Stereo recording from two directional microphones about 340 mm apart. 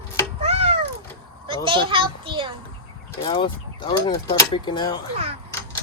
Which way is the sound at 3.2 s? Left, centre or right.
Centre.